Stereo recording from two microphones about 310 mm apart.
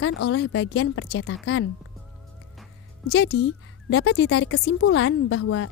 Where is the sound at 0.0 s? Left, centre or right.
Left.